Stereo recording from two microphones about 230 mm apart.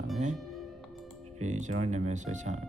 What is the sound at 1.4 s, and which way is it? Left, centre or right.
Speech, right.